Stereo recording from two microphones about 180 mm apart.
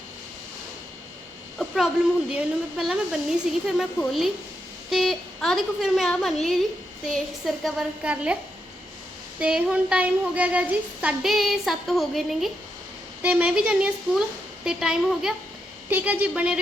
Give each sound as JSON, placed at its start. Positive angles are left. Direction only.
{"t": 1.5, "sound": "a woman's voice", "side_deg": 0}
{"t": 9.4, "sound": "a woman's voice", "side_deg": -5}